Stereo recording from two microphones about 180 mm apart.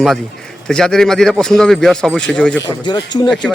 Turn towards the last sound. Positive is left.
turn(degrees=0)  # may be behind; listen again after turning